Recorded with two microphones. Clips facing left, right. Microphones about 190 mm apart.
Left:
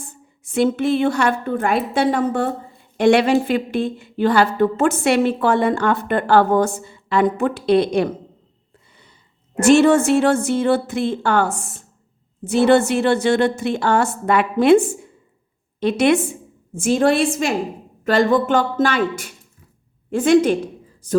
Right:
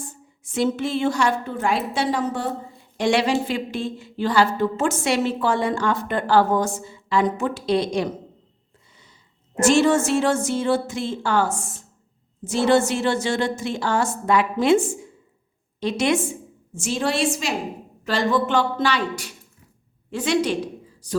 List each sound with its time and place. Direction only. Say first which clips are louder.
0.4 s a woman's voice: left 5 dB; 55° left (ahead or behind)
9.6 s a woman's voice: left 5 dB; 60° left (ahead or behind)